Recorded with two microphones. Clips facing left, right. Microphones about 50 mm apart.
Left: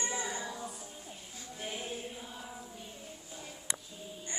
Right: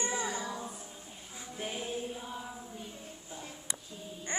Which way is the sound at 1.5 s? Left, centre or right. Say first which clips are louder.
Right 2 dB; centre.